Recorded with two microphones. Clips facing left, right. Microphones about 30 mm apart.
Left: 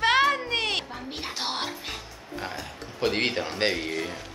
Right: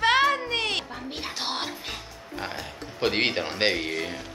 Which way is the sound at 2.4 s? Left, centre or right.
Centre.